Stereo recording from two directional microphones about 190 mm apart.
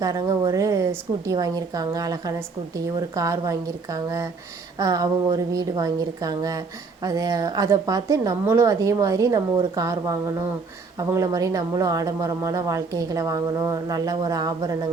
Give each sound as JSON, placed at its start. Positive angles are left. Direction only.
{"t": 0.0, "sound": "a woman's voice", "side_deg": -20}